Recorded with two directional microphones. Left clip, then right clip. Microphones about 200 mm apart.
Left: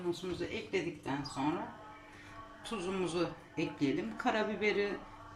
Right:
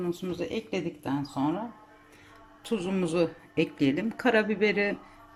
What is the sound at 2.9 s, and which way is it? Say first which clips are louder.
Speech: right 7 dB; 50° right (ahead or behind).